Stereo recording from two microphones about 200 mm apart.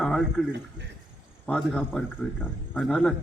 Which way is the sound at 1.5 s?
5° left (ahead or behind).